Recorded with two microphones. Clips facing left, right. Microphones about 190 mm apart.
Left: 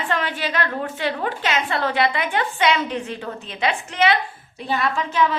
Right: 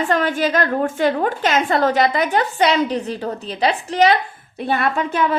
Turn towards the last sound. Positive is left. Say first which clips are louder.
# right 2 dB
turn(degrees=-55)  # may be behind; listen again after turning